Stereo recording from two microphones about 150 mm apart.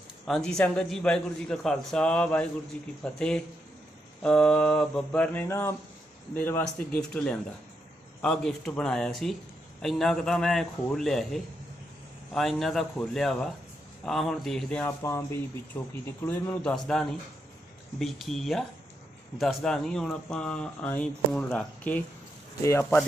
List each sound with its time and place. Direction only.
0.3 s speech: 5° left (ahead or behind)
22.6 s speech: 20° left (ahead or behind)